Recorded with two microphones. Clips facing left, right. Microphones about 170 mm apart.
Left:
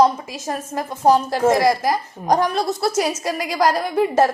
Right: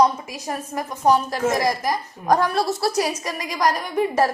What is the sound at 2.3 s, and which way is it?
A woman's voice, 20° left (ahead or behind).